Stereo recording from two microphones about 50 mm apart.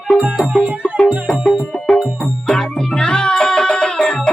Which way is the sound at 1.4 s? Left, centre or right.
Centre.